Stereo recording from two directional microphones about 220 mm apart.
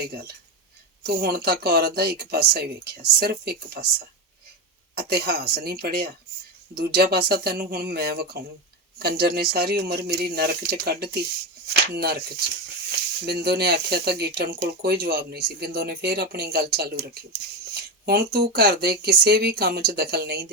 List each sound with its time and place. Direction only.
1.0 s speech: 45° right (ahead or behind)
4.9 s speech: 45° right (ahead or behind)
13.2 s speech: 45° right (ahead or behind)